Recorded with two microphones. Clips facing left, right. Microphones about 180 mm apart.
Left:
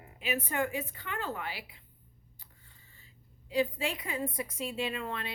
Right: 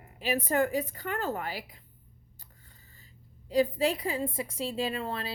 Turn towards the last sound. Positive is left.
turn(degrees=-35)  # may be behind; listen again after turning